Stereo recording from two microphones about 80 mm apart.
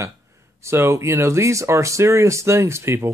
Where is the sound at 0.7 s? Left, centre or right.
Right.